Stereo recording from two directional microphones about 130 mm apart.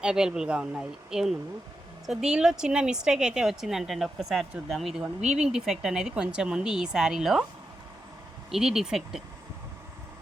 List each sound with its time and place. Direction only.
0.0 s a woman's voice: 5° right (ahead or behind)
5.2 s speech: 60° right (ahead or behind)
5.5 s a woman's voice: 5° right (ahead or behind)
8.4 s a woman's voice: 5° right (ahead or behind)